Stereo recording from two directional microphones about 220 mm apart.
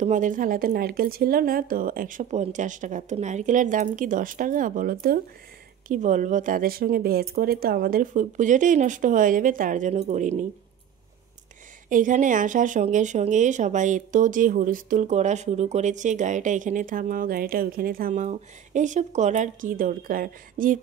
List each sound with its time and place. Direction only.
0.0 s speech: 35° right (ahead or behind)
11.9 s speech: 35° right (ahead or behind)